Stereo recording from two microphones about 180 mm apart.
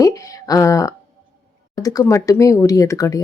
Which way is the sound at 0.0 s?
20° left (ahead or behind).